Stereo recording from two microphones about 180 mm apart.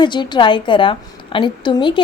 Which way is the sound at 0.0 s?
25° left (ahead or behind).